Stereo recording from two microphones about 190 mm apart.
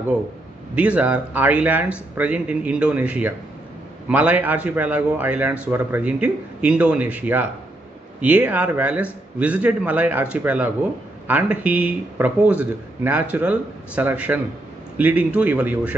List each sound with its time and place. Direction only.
0.7 s a man's voice: 5° right (ahead or behind)